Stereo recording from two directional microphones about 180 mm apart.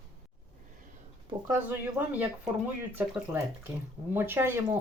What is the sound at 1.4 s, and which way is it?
Speech, 10° right (ahead or behind).